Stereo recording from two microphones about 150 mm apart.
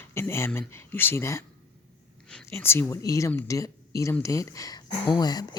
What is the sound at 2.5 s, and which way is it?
Speech, 15° left (ahead or behind).